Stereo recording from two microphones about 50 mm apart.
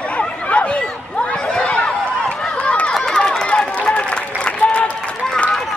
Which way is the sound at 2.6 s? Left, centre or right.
Left.